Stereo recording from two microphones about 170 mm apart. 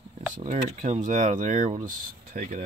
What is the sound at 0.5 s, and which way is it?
Speech, 45° right (ahead or behind).